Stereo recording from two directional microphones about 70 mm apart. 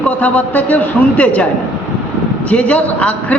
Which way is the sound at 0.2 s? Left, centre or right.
Left.